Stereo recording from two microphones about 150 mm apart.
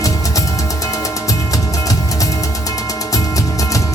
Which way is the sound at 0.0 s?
20° left (ahead or behind).